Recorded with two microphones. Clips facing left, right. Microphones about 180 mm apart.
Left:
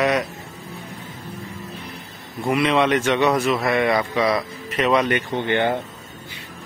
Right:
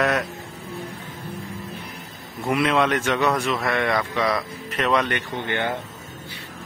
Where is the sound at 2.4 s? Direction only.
Centre (ahead or behind).